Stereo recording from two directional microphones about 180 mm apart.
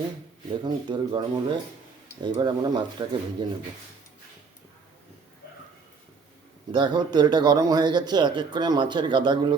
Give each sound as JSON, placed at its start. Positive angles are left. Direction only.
{"t": 0.6, "sound": "a man's voice", "side_deg": -25}
{"t": 6.7, "sound": "a man's voice", "side_deg": -25}